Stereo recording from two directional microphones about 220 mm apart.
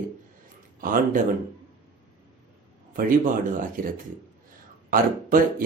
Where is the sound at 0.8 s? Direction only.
40° right (ahead or behind).